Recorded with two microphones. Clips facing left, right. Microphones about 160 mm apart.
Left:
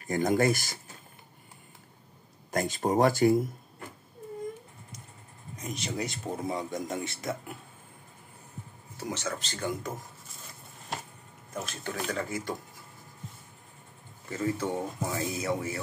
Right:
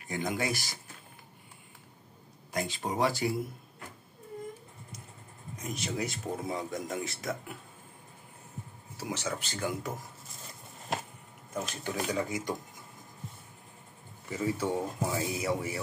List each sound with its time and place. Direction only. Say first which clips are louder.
0.0 s speech: left 8 dB; 45° left (ahead or behind)
2.5 s speech: left 6 dB; 45° left (ahead or behind)
5.6 s speech: even; centre (ahead or behind)
8.9 s speech: left 1 dB; 10° right (ahead or behind)
11.5 s speech: right 1 dB; 15° right (ahead or behind)
14.3 s speech: even; 10° right (ahead or behind)